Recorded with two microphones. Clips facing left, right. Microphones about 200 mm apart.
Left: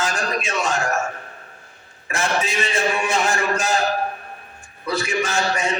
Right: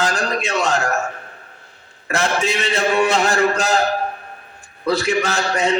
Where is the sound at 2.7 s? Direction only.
65° right (ahead or behind).